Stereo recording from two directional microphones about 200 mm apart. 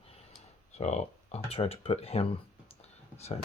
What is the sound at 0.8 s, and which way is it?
Speech, 35° left (ahead or behind).